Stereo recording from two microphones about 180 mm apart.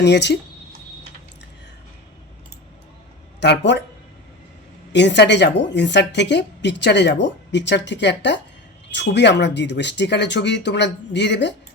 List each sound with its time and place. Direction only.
0.0 s a woman's voice: 70° left (ahead or behind)
3.4 s a woman's voice: 75° left (ahead or behind)
4.9 s a woman's voice: 75° left (ahead or behind)